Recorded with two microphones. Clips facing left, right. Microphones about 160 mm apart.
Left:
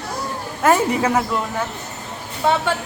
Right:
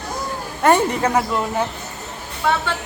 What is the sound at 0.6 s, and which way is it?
Speech, 5° left (ahead or behind).